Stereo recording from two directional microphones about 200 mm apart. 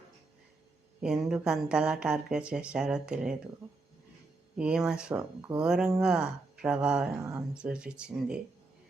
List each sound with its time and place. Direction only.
1.0 s speech: 5° right (ahead or behind)
4.5 s speech: 5° right (ahead or behind)